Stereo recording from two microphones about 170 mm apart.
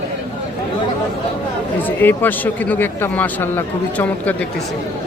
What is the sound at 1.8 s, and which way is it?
Speech, 10° left (ahead or behind).